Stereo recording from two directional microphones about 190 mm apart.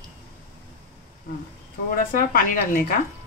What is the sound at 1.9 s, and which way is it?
Speech, 50° left (ahead or behind).